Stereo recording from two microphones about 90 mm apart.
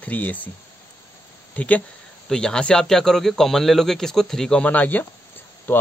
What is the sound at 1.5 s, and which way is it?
Speech, 15° left (ahead or behind).